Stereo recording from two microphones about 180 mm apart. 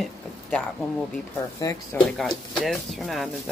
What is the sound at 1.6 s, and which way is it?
Speech, 20° left (ahead or behind).